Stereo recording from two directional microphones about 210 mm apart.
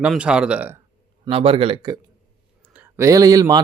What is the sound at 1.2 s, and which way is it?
Speech, 25° right (ahead or behind).